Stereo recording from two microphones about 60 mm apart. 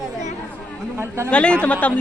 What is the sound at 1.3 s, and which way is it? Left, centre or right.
Speech, centre.